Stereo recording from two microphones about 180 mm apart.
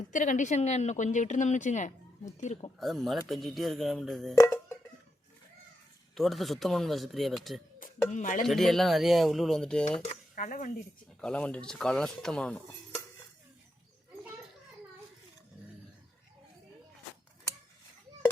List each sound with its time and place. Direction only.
0.1 s speech: 45° left (ahead or behind)
2.7 s speech: centre (ahead or behind)
4.4 s a sound: 15° left (ahead or behind)
6.1 s speech: centre (ahead or behind)
8.1 s speech: 45° left (ahead or behind)
8.4 s speech: centre (ahead or behind)
10.3 s speech: 45° left (ahead or behind)
11.2 s speech: 5° left (ahead or behind)